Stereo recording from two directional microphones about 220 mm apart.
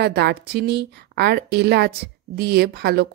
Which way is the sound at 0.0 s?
50° right (ahead or behind).